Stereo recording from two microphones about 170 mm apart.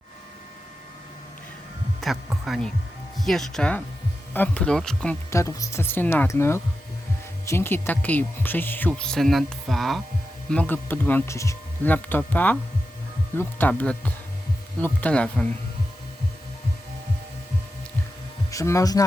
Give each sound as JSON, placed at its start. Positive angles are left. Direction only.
{"t": 2.0, "sound": "speech", "side_deg": 0}
{"t": 5.3, "sound": "speech", "side_deg": 20}
{"t": 18.5, "sound": "speech", "side_deg": 20}